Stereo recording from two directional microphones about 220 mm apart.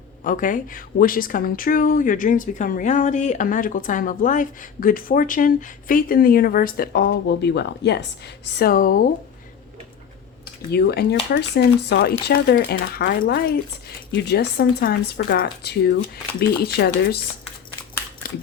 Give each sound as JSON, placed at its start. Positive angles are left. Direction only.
{"t": 0.3, "sound": "a woman's voice", "side_deg": 35}
{"t": 10.7, "sound": "speech", "side_deg": 45}